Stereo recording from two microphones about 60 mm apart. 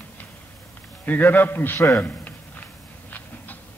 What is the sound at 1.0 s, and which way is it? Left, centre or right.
Speech, left.